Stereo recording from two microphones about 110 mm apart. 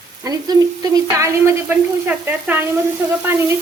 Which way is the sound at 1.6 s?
15° right (ahead or behind).